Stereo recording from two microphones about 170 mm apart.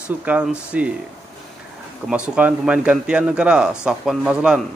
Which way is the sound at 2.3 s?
5° right (ahead or behind).